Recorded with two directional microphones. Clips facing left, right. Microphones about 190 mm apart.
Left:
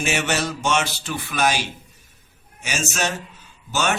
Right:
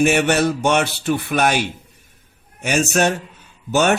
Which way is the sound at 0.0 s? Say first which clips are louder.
Right 8 dB; 55° right (ahead or behind).